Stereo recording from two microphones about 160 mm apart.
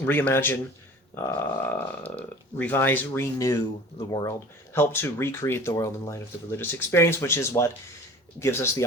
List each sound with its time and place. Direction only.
0.0 s speech: 10° left (ahead or behind)